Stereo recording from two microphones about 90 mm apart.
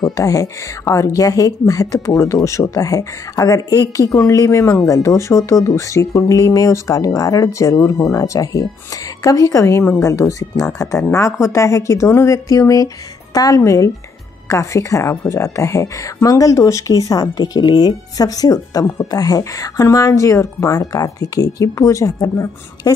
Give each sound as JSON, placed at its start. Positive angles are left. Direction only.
{"t": 0.1, "sound": "speech", "side_deg": 40}